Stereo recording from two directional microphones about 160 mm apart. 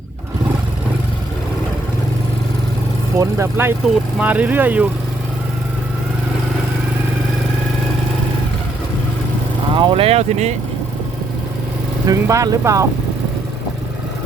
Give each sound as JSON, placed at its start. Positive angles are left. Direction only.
{"t": 3.2, "sound": "speech", "side_deg": -15}
{"t": 9.7, "sound": "speech", "side_deg": -35}
{"t": 12.0, "sound": "speech", "side_deg": -20}